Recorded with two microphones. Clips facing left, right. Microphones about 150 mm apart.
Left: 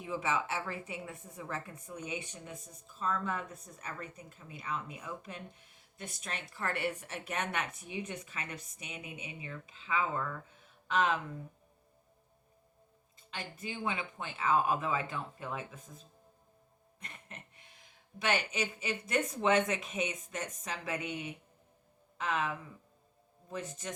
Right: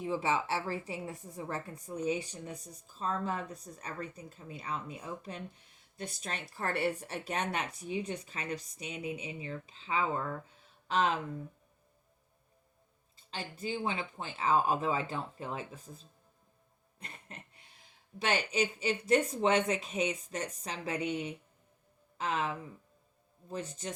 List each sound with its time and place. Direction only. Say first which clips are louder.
0.0 s a woman's voice: right 3 dB; 35° right (ahead or behind)
13.3 s a woman's voice: right 4 dB; 30° right (ahead or behind)
17.0 s a sound: right 1 dB; 35° right (ahead or behind)
18.2 s a woman's voice: right 2 dB; 30° right (ahead or behind)